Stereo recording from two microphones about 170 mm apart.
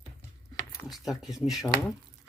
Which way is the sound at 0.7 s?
Centre (ahead or behind).